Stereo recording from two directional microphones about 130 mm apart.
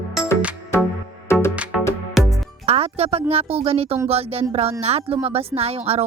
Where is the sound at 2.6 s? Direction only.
50° right (ahead or behind).